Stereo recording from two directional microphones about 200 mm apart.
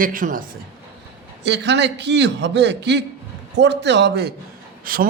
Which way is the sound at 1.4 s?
60° right (ahead or behind).